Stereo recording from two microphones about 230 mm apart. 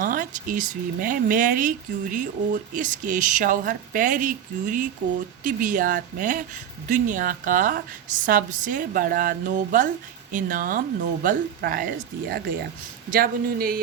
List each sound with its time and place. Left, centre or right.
0.0 s speech: right